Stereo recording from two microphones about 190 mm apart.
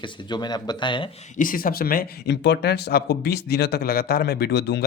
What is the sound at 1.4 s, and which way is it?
Speech, 45° left (ahead or behind).